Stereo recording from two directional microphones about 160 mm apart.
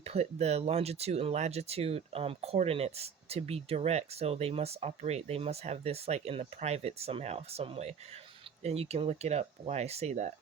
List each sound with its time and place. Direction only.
0.0 s speech: 40° right (ahead or behind)